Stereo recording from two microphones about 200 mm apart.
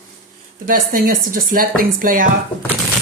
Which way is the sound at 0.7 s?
40° right (ahead or behind).